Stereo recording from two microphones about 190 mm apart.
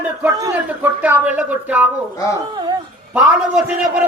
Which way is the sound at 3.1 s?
5° right (ahead or behind).